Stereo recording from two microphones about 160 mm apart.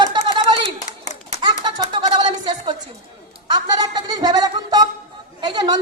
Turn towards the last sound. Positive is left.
turn(degrees=-25)  # may be behind; listen again after turning